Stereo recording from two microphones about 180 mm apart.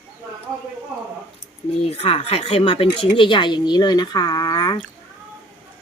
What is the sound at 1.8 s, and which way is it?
Speech, 35° left (ahead or behind).